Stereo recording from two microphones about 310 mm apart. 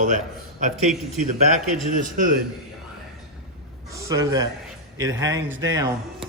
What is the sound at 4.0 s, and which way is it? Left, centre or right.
Speech, centre.